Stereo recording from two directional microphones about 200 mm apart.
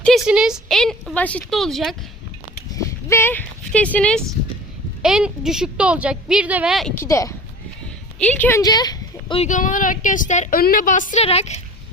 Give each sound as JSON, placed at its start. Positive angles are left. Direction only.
{"t": 0.0, "sound": "speech", "side_deg": 0}
{"t": 2.7, "sound": "speech", "side_deg": 15}
{"t": 6.9, "sound": "speech", "side_deg": 15}
{"t": 9.4, "sound": "speech", "side_deg": 40}